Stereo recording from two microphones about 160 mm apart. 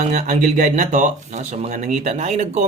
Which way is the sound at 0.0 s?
50° right (ahead or behind).